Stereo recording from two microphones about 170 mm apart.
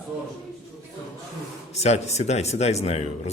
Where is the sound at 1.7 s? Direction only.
40° left (ahead or behind).